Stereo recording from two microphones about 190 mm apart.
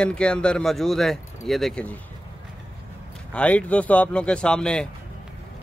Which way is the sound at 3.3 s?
5° left (ahead or behind).